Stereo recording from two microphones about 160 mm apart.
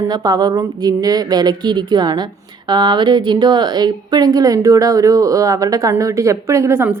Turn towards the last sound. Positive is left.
turn(degrees=-15)  # may be behind; listen again after turning